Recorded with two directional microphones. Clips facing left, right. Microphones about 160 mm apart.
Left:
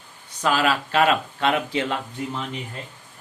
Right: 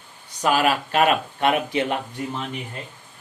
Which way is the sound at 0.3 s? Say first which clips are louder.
Right 1 dB; 15° right (ahead or behind).